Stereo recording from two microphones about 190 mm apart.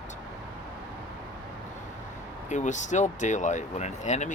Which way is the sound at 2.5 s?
40° left (ahead or behind).